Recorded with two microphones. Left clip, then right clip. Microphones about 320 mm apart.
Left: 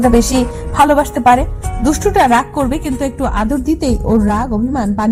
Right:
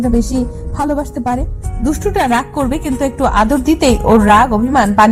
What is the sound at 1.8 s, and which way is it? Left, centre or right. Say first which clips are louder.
A woman's voice: left 4 dB; centre.